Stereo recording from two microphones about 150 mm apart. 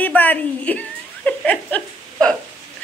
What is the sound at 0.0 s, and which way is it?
Chuckle, 10° left (ahead or behind).